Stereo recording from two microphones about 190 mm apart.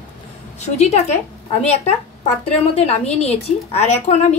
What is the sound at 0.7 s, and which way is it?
A woman's voice, 35° left (ahead or behind).